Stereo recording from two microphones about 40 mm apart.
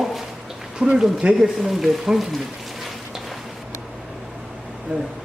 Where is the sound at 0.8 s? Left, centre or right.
Right.